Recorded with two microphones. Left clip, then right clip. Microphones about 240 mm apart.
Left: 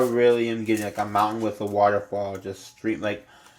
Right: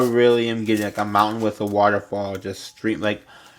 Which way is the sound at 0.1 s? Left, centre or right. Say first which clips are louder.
Right 3 dB; right.